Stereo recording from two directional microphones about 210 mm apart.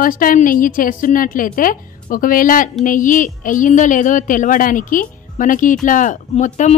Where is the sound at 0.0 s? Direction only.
40° left (ahead or behind).